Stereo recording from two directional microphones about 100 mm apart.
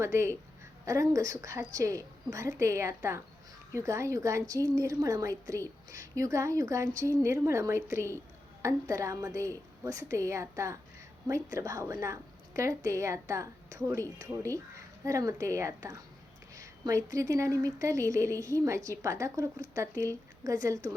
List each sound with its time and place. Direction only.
0.0 s a woman's voice: 30° right (ahead or behind)